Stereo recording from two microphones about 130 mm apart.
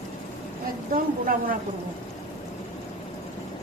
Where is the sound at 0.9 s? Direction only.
90° right.